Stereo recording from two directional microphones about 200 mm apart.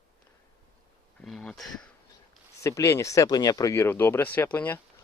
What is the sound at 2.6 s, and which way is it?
Speech, 15° left (ahead or behind).